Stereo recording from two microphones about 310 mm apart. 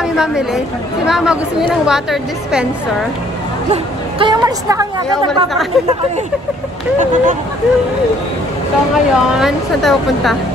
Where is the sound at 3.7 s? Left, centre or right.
Centre.